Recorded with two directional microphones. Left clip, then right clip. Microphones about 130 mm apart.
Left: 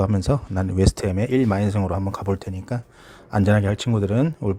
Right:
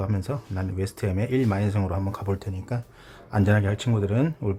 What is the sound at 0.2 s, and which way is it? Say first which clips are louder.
Speech: left 8 dB; 40° left (ahead or behind).